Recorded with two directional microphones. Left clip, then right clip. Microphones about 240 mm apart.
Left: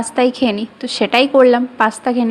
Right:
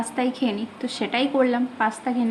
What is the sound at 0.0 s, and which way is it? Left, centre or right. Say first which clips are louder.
A woman's voice: left 10 dB; left.